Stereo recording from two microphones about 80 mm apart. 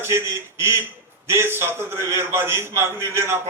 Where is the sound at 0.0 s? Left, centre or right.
Right.